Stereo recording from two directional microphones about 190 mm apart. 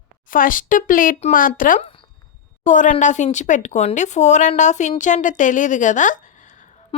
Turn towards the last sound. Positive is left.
turn(degrees=40)  # may be behind; listen again after turning